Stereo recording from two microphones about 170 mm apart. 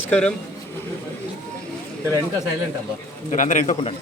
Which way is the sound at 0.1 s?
5° left (ahead or behind).